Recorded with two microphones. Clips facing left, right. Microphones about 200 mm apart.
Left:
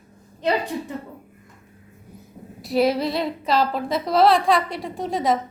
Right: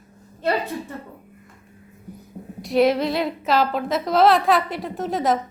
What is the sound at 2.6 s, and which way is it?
A woman's voice, centre (ahead or behind).